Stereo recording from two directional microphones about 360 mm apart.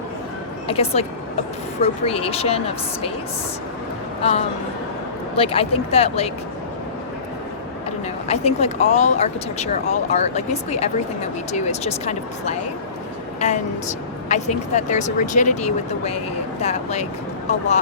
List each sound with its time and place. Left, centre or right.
0.7 s speech: centre
4.2 s speech: centre
8.3 s speech: centre
14.3 s speech: centre